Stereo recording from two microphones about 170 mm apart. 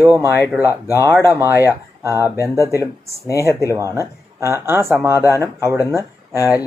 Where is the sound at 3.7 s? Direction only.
15° right (ahead or behind).